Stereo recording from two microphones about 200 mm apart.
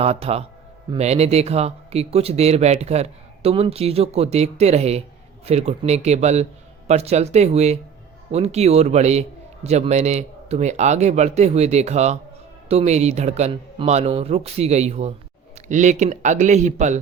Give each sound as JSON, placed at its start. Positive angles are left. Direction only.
{"t": 0.0, "sound": "a man's voice", "side_deg": -30}